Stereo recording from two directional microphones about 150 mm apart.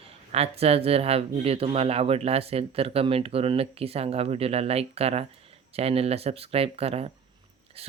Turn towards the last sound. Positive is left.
turn(degrees=-40)  # may be behind; listen again after turning